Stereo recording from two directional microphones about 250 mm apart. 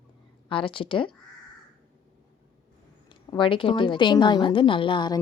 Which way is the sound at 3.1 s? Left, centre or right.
Centre.